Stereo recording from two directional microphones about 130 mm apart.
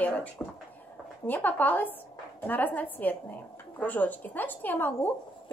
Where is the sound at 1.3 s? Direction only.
15° left (ahead or behind).